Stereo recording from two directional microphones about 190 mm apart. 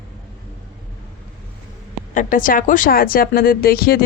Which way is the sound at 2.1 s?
45° left (ahead or behind).